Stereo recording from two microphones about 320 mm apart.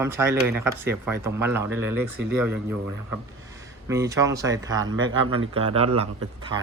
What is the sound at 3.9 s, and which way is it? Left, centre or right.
Speech, centre.